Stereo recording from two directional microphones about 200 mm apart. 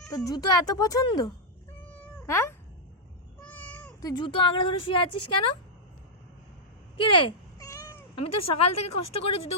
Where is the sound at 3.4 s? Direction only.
5° left (ahead or behind).